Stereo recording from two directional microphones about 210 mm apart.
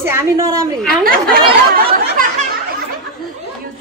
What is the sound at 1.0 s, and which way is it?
Speech, 40° right (ahead or behind).